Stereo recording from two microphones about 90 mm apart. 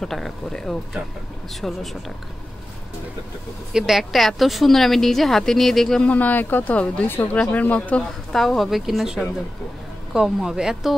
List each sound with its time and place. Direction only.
0.0 s a woman's voice: 5° left (ahead or behind)
3.7 s a woman's voice: centre (ahead or behind)
6.0 s speech: 15° left (ahead or behind)
8.4 s a woman's voice: centre (ahead or behind)